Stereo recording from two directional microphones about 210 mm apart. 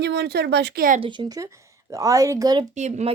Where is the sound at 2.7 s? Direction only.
35° right (ahead or behind).